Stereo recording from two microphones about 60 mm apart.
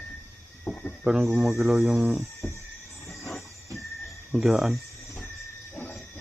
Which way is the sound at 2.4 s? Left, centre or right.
Left.